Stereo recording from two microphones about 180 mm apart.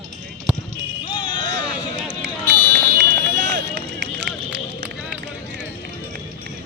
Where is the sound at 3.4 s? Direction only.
75° right (ahead or behind).